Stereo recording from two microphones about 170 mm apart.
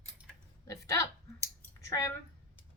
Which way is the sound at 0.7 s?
20° left (ahead or behind).